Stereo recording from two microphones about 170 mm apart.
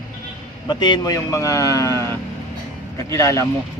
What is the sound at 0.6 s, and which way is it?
Speech, 25° left (ahead or behind).